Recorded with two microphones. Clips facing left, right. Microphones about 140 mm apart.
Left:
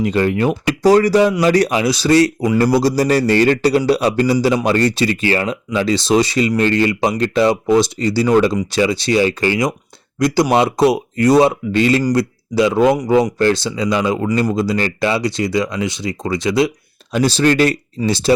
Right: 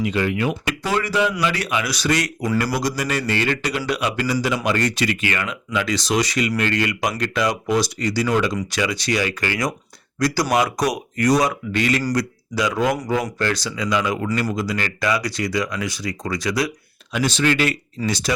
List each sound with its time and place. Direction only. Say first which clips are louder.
0.0 s speech: left 6 dB; 40° left (ahead or behind); by 16.7 s 25° left (ahead or behind)
17.1 s speech: left 6 dB; 35° left (ahead or behind)